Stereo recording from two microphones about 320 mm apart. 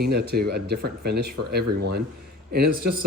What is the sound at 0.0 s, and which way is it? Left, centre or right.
A man's voice, right.